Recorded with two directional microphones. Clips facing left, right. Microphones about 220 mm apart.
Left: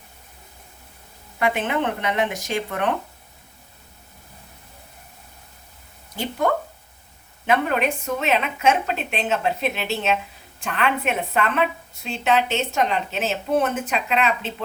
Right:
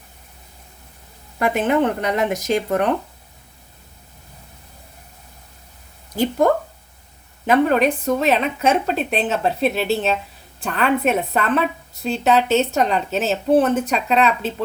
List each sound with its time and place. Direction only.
1.4 s a woman's voice: 40° right (ahead or behind)
7.4 s a woman's voice: 40° right (ahead or behind)